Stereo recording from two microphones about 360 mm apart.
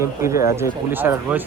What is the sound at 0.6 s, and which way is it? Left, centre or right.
Speech, centre.